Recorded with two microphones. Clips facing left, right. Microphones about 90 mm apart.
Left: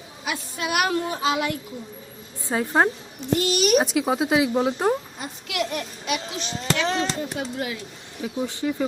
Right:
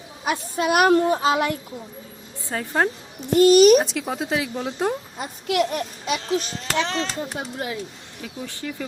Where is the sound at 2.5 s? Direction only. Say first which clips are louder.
Left 2 dB; 15° left (ahead or behind).